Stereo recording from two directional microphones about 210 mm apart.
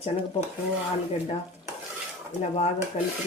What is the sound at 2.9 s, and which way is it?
Stir, 35° left (ahead or behind).